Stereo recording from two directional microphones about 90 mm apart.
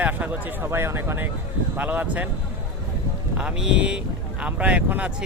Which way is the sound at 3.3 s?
10° right (ahead or behind).